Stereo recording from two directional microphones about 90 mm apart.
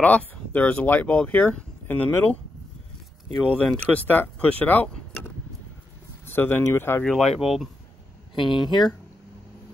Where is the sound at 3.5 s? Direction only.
10° left (ahead or behind).